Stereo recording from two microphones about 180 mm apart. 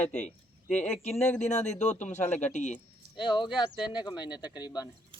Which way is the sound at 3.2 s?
25° left (ahead or behind).